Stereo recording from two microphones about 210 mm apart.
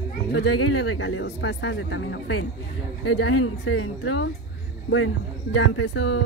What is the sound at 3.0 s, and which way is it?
Speech, 90° left.